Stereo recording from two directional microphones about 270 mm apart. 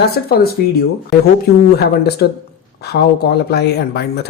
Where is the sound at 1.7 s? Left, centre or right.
Left.